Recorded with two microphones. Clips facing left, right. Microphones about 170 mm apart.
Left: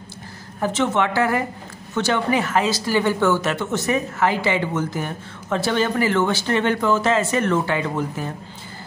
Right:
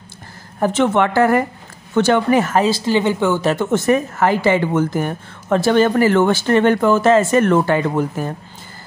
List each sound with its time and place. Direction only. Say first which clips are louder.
0.6 s speech: right 5 dB; 55° right (ahead or behind)
2.7 s a woman's voice: right 4 dB; 25° right (ahead or behind)
3.5 s speech: right 6 dB; 50° right (ahead or behind)